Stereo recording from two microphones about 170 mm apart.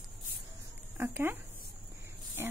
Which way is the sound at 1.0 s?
15° right (ahead or behind).